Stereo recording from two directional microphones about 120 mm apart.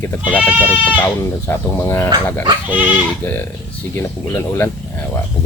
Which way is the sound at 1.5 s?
20° left (ahead or behind).